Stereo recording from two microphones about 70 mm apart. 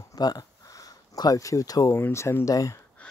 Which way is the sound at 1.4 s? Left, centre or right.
Left.